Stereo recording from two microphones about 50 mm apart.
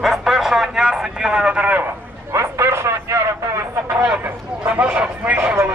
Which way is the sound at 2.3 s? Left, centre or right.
Right.